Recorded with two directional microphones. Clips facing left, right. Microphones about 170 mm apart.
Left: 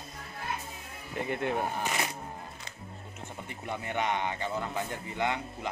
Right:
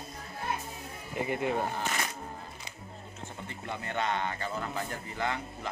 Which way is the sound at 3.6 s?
15° left (ahead or behind).